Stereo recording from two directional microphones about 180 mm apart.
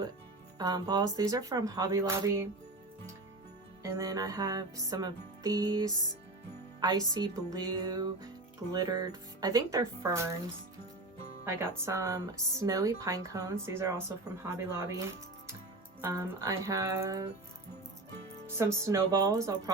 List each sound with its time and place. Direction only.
0.6 s music: 20° right (ahead or behind)
3.8 s music: 15° right (ahead or behind)
11.4 s speech: 15° right (ahead or behind)
18.5 s speech: 15° right (ahead or behind)